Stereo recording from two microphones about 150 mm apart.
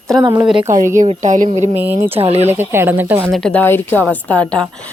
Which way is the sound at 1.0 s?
55° right (ahead or behind).